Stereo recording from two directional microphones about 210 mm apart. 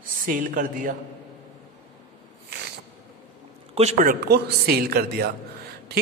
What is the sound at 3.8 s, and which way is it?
A man's voice, 35° right (ahead or behind).